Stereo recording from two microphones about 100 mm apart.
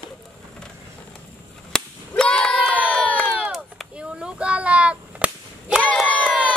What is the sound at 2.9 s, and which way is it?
Crowd, 10° left (ahead or behind).